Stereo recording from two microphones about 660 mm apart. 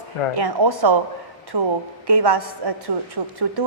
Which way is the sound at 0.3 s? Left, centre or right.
Right.